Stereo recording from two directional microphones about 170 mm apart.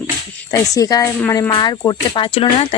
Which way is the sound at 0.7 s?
20° left (ahead or behind).